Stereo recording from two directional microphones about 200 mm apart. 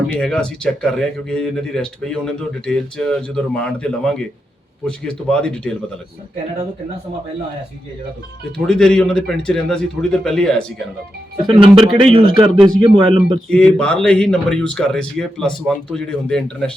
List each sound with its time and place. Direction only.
0.1 s speech: 5° left (ahead or behind)
8.5 s speech: 5° left (ahead or behind)
11.5 s speech: 25° right (ahead or behind)
13.5 s speech: 5° left (ahead or behind)